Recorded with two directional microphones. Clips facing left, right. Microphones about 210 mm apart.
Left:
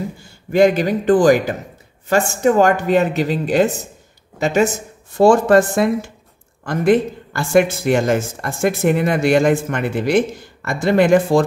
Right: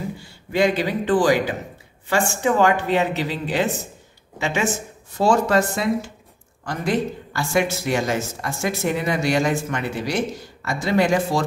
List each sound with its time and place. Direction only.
0.2 s a woman's voice: 45° left (ahead or behind)